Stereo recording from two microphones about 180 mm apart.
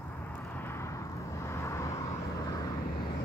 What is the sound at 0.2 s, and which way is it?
Vehicle, 10° left (ahead or behind).